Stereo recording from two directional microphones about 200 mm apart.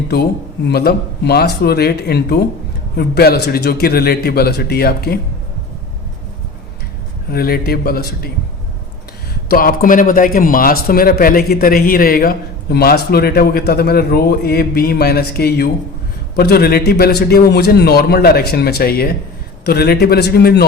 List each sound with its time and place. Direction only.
0.1 s a man's voice: 55° left (ahead or behind)
7.3 s a man's voice: 50° left (ahead or behind)
9.5 s a man's voice: 45° left (ahead or behind)